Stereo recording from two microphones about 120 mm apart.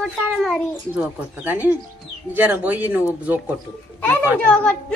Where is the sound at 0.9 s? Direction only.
15° right (ahead or behind).